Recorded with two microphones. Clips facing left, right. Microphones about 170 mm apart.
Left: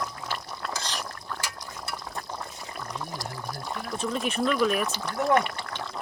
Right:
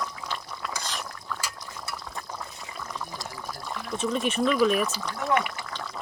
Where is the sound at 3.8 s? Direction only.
Centre (ahead or behind).